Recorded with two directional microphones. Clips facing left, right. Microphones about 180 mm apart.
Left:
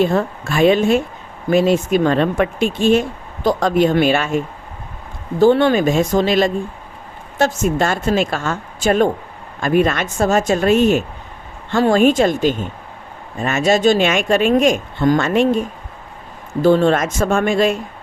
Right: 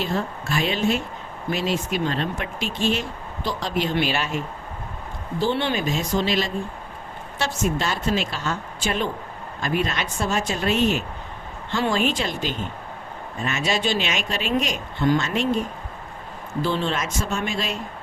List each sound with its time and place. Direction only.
0.0 s speech: 55° left (ahead or behind)